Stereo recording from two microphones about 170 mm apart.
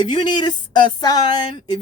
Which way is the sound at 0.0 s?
25° left (ahead or behind).